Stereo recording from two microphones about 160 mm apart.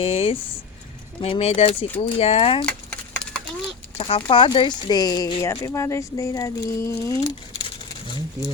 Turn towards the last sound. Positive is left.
turn(degrees=20)  # may be behind; listen again after turning